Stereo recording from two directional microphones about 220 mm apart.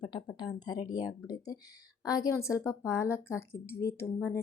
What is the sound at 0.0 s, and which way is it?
A woman's voice, 20° left (ahead or behind).